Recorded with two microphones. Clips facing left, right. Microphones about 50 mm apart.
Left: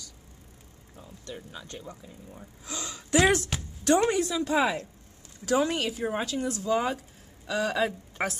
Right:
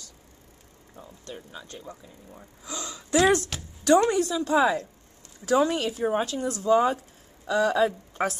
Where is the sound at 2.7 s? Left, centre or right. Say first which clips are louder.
Right 2 dB; right.